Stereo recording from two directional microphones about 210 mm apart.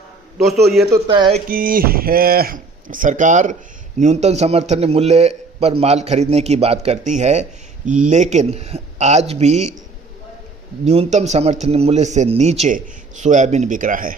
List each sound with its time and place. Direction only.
0.3 s a man's voice: centre (ahead or behind)
0.9 s speech: 15° right (ahead or behind)
1.5 s a man's voice: 40° right (ahead or behind)
10.8 s a man's voice: 30° right (ahead or behind)